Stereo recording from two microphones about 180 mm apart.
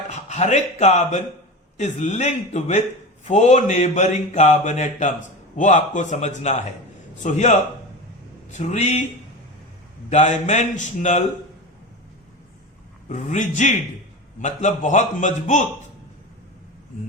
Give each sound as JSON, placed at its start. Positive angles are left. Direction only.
{"t": 0.1, "sound": "a man's voice", "side_deg": 40}
{"t": 10.1, "sound": "speech", "side_deg": 40}
{"t": 13.1, "sound": "a man's voice", "side_deg": 45}